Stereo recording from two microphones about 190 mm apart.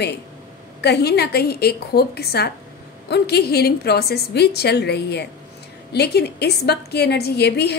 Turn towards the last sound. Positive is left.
turn(degrees=60)  # may be behind; listen again after turning